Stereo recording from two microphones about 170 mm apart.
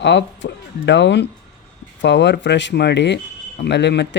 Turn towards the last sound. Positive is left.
turn(degrees=90)